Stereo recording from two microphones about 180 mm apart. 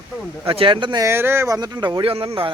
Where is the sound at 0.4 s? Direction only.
30° right (ahead or behind).